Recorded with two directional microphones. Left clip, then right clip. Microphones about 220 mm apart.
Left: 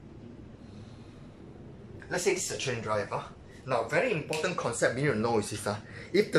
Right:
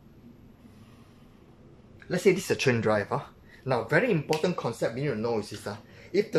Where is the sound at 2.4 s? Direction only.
45° right (ahead or behind).